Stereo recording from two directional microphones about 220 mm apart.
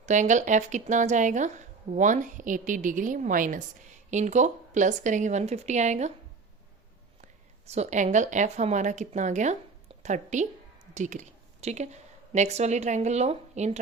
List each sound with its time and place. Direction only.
0.0 s speech: 35° right (ahead or behind)
7.7 s speech: 30° right (ahead or behind)